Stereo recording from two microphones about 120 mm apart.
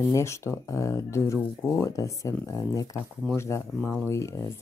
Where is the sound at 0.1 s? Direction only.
25° left (ahead or behind).